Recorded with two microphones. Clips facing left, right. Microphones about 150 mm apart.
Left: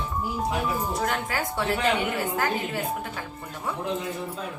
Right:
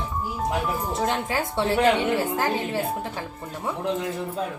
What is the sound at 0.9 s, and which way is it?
A woman's voice, 25° right (ahead or behind).